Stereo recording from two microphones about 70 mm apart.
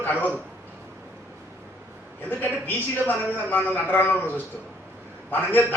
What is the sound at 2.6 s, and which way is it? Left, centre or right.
A man's voice, left.